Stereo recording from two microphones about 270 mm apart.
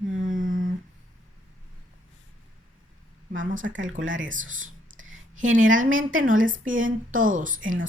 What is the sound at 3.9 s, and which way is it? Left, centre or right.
Speech, right.